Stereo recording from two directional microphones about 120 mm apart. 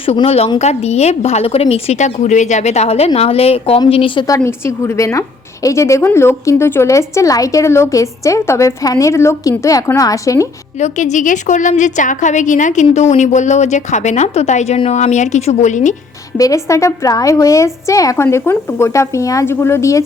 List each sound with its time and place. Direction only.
0.0 s a woman's voice: 55° left (ahead or behind)
4.4 s a woman's voice: 20° left (ahead or behind)
10.8 s a woman's voice: 80° left
16.4 s a woman's voice: 25° left (ahead or behind)